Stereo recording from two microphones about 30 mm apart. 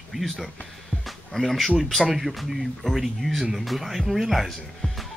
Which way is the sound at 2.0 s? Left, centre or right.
Centre.